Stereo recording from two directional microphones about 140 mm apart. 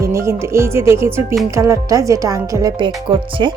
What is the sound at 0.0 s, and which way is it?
A woman's voice, 20° right (ahead or behind).